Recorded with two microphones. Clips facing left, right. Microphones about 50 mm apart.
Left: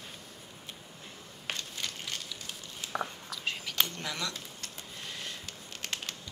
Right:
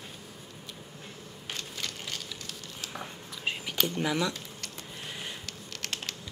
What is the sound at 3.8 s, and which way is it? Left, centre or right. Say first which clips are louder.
Speech: right 8 dB; centre.